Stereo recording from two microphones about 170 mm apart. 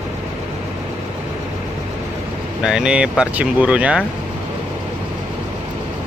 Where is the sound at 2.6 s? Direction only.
5° right (ahead or behind).